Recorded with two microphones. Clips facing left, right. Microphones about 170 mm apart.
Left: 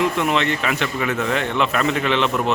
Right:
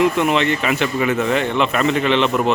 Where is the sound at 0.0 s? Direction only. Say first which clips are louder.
Right 3 dB; centre (ahead or behind).